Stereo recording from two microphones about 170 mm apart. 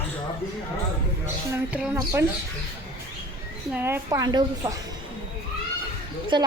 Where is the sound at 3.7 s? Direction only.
15° right (ahead or behind).